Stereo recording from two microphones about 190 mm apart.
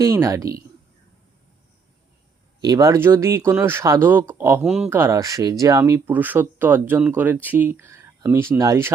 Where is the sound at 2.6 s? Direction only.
20° right (ahead or behind).